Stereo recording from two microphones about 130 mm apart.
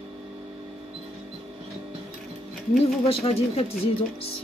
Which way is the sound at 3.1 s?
50° left (ahead or behind).